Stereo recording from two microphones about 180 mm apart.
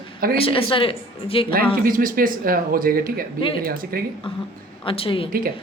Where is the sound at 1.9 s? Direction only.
50° right (ahead or behind).